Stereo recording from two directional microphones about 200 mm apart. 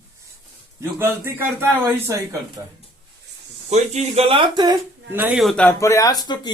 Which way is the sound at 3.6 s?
35° right (ahead or behind).